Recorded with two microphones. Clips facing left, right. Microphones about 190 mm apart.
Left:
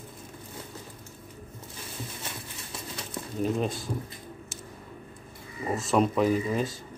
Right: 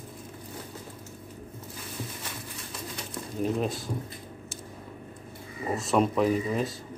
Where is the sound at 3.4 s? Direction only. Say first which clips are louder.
Even; centre (ahead or behind).